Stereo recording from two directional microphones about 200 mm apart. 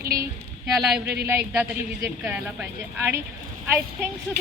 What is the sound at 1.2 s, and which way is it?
Speech, 10° right (ahead or behind).